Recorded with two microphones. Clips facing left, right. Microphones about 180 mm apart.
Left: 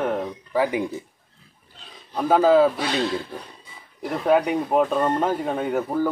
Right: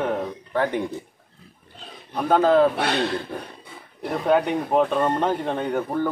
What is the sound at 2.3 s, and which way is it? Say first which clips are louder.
Speech: left 1 dB; 5° left (ahead or behind).